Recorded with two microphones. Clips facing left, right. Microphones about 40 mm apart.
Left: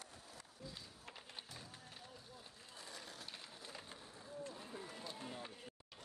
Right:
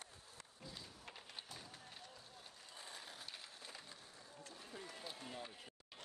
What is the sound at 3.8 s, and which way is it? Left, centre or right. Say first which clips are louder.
Skateboard: left 3 dB; centre.